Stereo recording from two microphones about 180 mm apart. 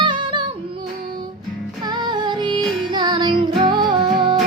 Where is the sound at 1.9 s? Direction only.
25° right (ahead or behind).